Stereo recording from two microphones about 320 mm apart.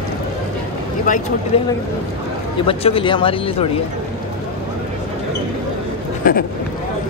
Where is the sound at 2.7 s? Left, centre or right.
Centre.